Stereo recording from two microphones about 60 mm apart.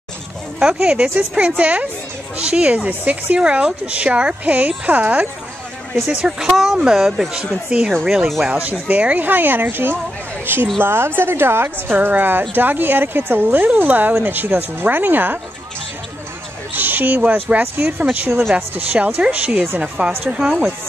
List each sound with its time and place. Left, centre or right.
0.6 s a woman's voice: centre; by 3.3 s right
3.3 s a woman's voice: centre
6.0 s speech: centre
6.5 s a woman's voice: centre; by 15.3 s right
16.7 s a woman's voice: right